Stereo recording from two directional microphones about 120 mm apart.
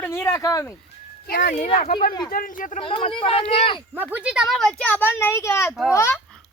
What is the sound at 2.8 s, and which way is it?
Speech, 50° left (ahead or behind).